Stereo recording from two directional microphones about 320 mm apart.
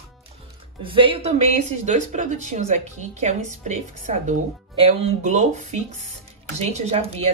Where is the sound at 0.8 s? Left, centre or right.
Centre.